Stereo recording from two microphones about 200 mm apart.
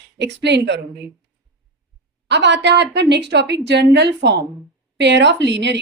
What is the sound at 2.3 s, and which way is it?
A woman's voice, 60° right (ahead or behind).